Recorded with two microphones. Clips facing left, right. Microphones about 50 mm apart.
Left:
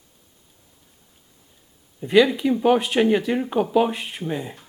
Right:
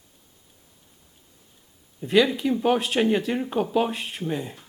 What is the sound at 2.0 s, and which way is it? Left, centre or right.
Speech, centre.